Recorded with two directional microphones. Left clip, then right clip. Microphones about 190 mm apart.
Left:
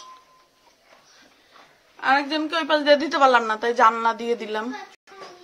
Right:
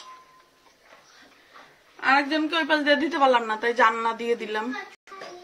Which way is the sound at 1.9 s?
10° left (ahead or behind).